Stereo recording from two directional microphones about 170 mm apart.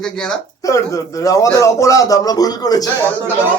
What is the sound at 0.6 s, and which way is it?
A man's voice, 20° left (ahead or behind).